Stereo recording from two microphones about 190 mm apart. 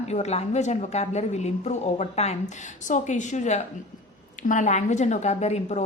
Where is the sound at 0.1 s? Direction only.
35° left (ahead or behind).